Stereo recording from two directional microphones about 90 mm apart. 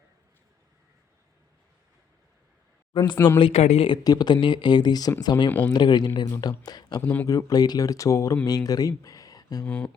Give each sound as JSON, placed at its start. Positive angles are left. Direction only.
{"t": 3.3, "sound": "speech", "side_deg": 70}
{"t": 4.0, "sound": "speech", "side_deg": 50}
{"t": 5.5, "sound": "speech", "side_deg": 15}
{"t": 5.7, "sound": "speech", "side_deg": 55}
{"t": 7.0, "sound": "speech", "side_deg": 20}
{"t": 7.3, "sound": "speech", "side_deg": 40}
{"t": 9.6, "sound": "speech", "side_deg": 10}